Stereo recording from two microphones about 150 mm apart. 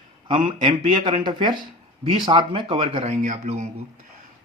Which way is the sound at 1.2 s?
30° right (ahead or behind).